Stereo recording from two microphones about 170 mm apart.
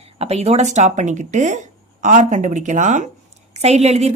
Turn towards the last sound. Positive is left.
turn(degrees=-40)  # may be behind; listen again after turning